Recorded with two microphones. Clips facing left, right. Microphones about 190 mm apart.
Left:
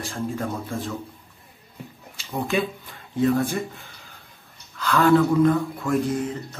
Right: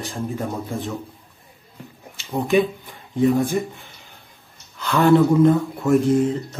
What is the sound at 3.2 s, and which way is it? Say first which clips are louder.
Speech: right 3 dB; 15° right (ahead or behind).